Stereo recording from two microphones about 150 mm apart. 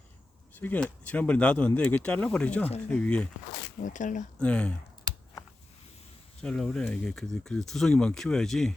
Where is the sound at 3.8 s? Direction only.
55° left (ahead or behind).